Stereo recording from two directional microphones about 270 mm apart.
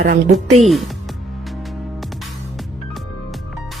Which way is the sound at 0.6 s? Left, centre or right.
Centre.